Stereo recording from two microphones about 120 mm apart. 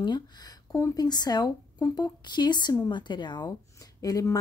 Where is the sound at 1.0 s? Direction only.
35° left (ahead or behind).